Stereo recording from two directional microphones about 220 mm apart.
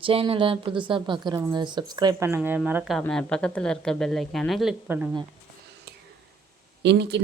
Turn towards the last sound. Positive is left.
turn(degrees=-50)  # may be behind; listen again after turning